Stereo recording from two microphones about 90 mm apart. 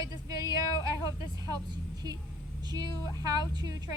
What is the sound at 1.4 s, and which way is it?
A woman's voice, 45° right (ahead or behind).